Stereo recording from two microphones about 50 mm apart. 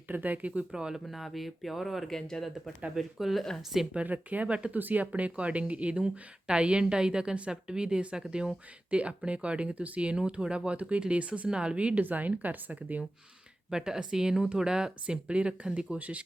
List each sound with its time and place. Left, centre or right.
0.1 s speech: right
0.7 s speech: centre
1.0 s speech: centre
2.9 s speech: centre
4.0 s speech: right
4.7 s speech: right
13.7 s speech: centre; by 16.2 s right